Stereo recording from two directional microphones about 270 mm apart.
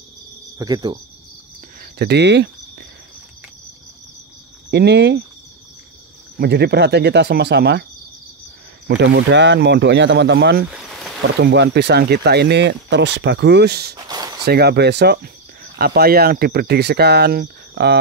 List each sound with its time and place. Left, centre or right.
0.6 s cricket: centre
1.8 s speech: right
4.6 s speech: right
6.4 s speech: right
8.8 s speech: right
14.0 s a sound: centre
14.4 s speech: right